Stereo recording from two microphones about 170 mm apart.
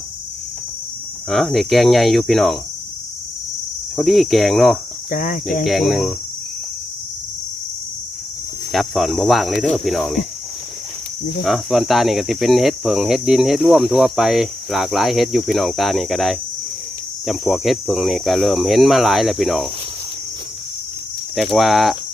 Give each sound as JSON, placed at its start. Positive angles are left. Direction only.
{"t": 1.3, "sound": "cricket", "side_deg": 0}
{"t": 3.9, "sound": "cricket", "side_deg": 0}
{"t": 5.1, "sound": "speech", "side_deg": 55}
{"t": 5.6, "sound": "cricket", "side_deg": 0}
{"t": 8.7, "sound": "cricket", "side_deg": 0}
{"t": 11.4, "sound": "cricket", "side_deg": 0}
{"t": 21.3, "sound": "cricket", "side_deg": 0}